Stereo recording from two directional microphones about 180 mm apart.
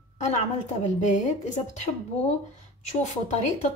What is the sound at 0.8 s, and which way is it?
A woman's voice, 45° left (ahead or behind).